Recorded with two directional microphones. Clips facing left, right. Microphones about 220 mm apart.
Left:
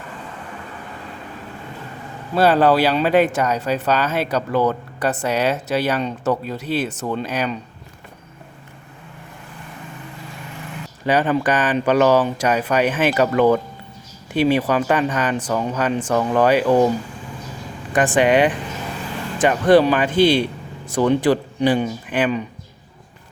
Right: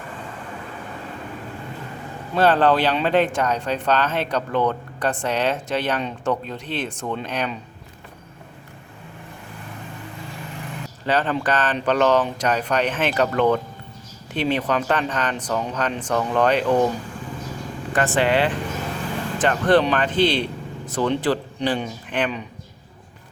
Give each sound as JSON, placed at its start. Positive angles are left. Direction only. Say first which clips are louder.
{"t": 2.3, "sound": "speech", "louder": "left 2 dB", "side_deg": 10}
{"t": 11.0, "sound": "speech", "louder": "left 4 dB", "side_deg": 10}
{"t": 17.9, "sound": "speech", "louder": "left 4 dB", "side_deg": 15}